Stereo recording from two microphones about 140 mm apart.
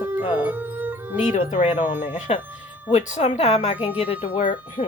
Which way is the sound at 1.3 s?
60° left (ahead or behind).